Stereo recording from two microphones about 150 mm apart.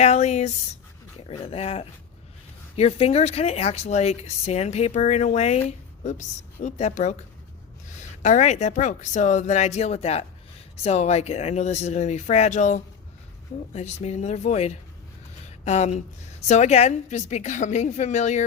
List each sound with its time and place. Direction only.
0.0 s speech: 50° left (ahead or behind)
8.2 s speech: 55° left (ahead or behind)
15.4 s a sound: 50° left (ahead or behind)
16.5 s speech: 50° left (ahead or behind)